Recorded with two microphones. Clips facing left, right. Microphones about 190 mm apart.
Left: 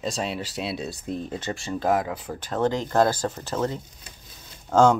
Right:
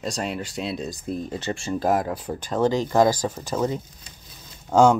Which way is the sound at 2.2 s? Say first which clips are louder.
Right 2 dB; 10° right (ahead or behind).